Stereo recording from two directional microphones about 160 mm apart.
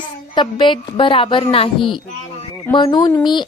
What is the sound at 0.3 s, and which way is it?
Speech, 30° left (ahead or behind).